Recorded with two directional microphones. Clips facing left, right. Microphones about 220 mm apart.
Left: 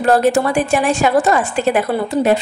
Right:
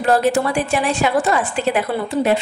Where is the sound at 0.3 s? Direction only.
45° left (ahead or behind).